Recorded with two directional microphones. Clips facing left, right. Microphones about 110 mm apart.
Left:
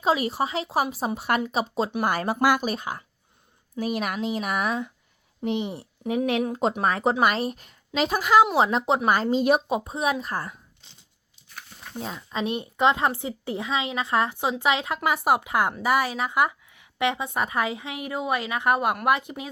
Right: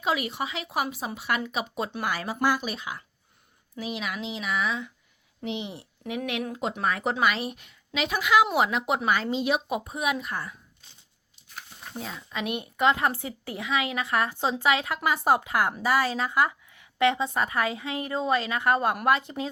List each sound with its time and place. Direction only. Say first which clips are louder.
0.0 s speech: left 5 dB; 35° left (ahead or behind)
1.5 s speech: left 5 dB; 35° left (ahead or behind)
2.0 s speech: left 4 dB; 55° left (ahead or behind)
2.6 s a woman's voice: left 5 dB; 45° left (ahead or behind)
9.0 s a woman's voice: left 6 dB; 45° left (ahead or behind)
9.6 s speech: left 3 dB; 25° left (ahead or behind)
12.3 s a woman's voice: left 3 dB; 30° left (ahead or behind); by 19.5 s 15° left (ahead or behind)